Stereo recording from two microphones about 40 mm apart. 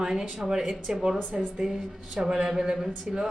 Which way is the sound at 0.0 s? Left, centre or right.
Centre.